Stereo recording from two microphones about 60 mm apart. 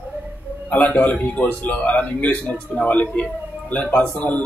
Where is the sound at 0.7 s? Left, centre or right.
Left.